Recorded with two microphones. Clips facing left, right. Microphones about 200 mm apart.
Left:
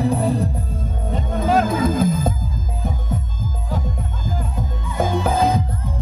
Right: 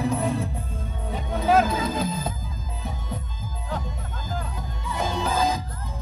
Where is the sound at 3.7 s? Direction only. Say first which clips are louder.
Left 4 dB; 50° left (ahead or behind).